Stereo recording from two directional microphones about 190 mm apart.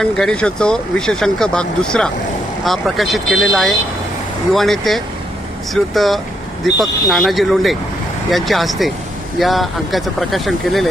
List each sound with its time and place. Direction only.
0.0 s speech: 5° left (ahead or behind)